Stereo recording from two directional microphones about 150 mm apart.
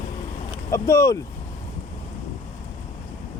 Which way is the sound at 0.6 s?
20° left (ahead or behind).